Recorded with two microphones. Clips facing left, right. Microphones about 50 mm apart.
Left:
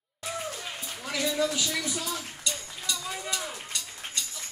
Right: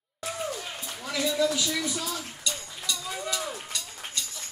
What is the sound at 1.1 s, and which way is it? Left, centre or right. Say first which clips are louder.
Speech: right 2 dB; centre.